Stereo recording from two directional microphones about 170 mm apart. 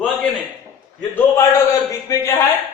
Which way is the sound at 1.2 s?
15° left (ahead or behind).